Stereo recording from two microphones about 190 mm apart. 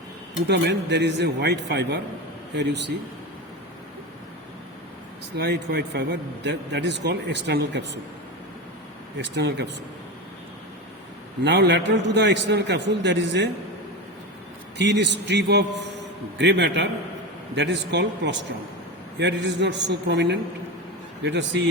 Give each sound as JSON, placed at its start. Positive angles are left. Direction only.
{"t": 0.4, "sound": "a man's voice", "side_deg": -65}
{"t": 5.4, "sound": "a man's voice", "side_deg": -60}
{"t": 9.1, "sound": "a man's voice", "side_deg": -65}
{"t": 11.4, "sound": "a man's voice", "side_deg": -65}
{"t": 14.8, "sound": "a man's voice", "side_deg": -65}